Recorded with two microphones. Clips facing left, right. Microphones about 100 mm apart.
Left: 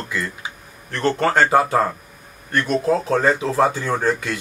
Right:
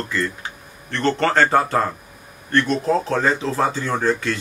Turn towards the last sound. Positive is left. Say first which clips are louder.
# even
turn(degrees=10)  # may be behind; listen again after turning